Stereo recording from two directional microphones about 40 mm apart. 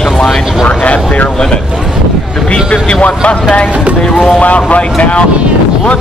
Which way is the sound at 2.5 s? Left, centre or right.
Left.